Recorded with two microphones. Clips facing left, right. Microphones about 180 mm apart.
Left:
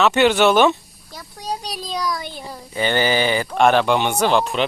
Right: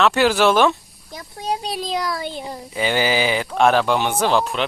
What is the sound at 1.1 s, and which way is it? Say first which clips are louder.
Speech: right 3 dB; 25° right (ahead or behind).